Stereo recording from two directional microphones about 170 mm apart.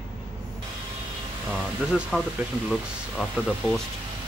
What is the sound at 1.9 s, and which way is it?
Speech, 5° right (ahead or behind).